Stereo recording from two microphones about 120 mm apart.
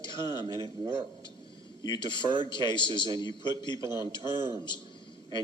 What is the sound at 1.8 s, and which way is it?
A man's voice, 40° left (ahead or behind).